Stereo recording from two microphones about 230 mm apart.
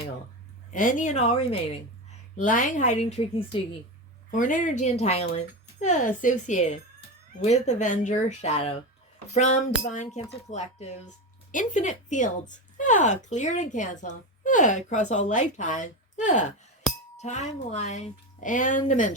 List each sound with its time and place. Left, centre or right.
0.7 s speech: left